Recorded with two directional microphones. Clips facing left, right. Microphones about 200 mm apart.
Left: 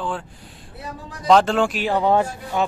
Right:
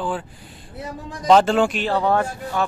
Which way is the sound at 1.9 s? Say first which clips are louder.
Left 1 dB; 20° left (ahead or behind).